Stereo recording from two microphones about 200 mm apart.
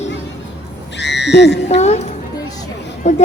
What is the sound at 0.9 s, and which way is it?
Speech, 60° left (ahead or behind).